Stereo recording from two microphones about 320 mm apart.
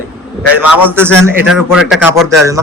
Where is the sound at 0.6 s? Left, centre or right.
Centre.